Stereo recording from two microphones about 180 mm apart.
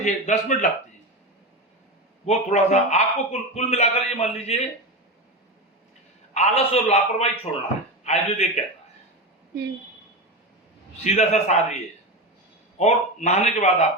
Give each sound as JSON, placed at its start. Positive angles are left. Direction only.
{"t": 0.0, "sound": "a man's voice", "side_deg": 40}
{"t": 2.2, "sound": "a man's voice", "side_deg": 40}
{"t": 6.3, "sound": "a man's voice", "side_deg": 35}
{"t": 11.0, "sound": "a man's voice", "side_deg": 40}
{"t": 12.8, "sound": "a man's voice", "side_deg": 40}